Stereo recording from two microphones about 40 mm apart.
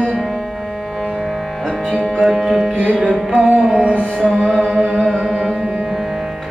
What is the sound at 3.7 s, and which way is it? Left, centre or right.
Music, right.